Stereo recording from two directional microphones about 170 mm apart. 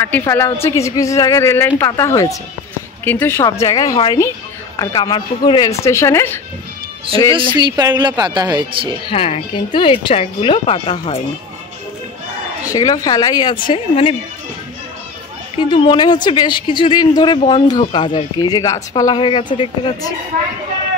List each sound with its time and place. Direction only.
0.0 s a woman's voice: 15° left (ahead or behind)
7.5 s speech: 25° right (ahead or behind)
9.1 s speech: 30° left (ahead or behind)
12.7 s speech: 20° left (ahead or behind)
15.7 s speech: 30° left (ahead or behind)